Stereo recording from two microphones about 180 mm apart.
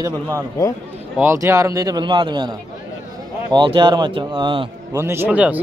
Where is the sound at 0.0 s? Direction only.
15° right (ahead or behind).